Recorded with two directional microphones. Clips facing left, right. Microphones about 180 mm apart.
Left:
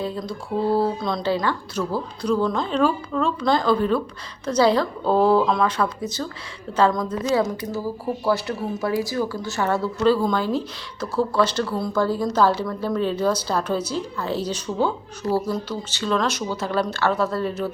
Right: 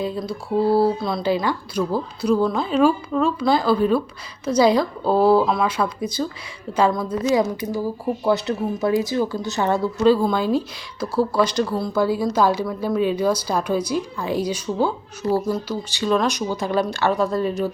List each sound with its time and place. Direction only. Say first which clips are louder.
0.0 s a woman's voice: right 2 dB; 10° right (ahead or behind)